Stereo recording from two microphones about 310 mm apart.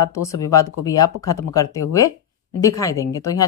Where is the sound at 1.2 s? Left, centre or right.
Left.